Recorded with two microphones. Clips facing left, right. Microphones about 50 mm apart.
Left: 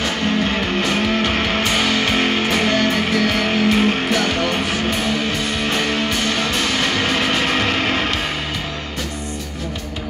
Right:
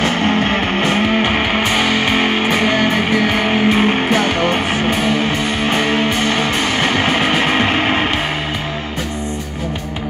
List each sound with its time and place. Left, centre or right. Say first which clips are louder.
0.0 s music: right 4 dB; right